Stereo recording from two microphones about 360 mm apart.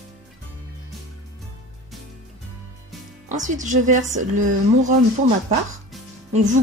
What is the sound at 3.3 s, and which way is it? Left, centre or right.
Speech, right.